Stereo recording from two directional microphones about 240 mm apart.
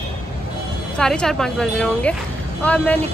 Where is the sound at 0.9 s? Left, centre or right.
Centre.